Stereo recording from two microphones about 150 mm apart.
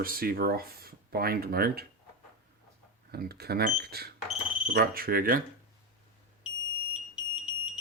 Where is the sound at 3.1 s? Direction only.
90° right.